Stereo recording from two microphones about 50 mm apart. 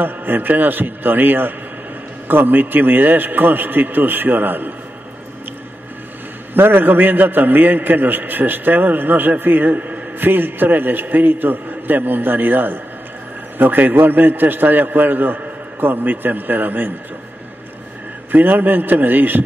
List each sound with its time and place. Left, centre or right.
0.0 s a man's voice: right
6.5 s a man's voice: right
18.3 s a man's voice: right